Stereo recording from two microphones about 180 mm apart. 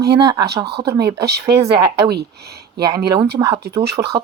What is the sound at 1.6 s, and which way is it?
Speech, 20° right (ahead or behind).